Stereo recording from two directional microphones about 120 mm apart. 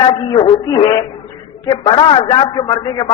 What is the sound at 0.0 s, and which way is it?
A man's voice, 45° left (ahead or behind).